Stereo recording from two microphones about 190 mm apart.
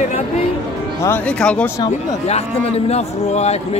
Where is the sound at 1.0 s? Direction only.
10° left (ahead or behind).